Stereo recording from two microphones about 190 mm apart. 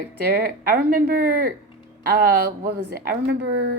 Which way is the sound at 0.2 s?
55° right (ahead or behind).